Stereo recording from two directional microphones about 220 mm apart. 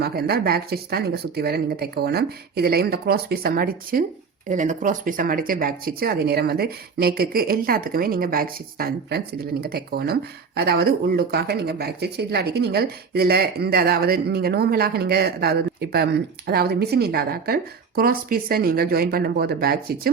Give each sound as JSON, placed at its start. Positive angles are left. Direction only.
{"t": 0.0, "sound": "speech", "side_deg": -45}